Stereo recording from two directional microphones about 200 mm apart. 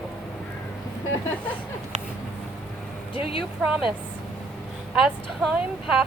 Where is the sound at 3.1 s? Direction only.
25° left (ahead or behind).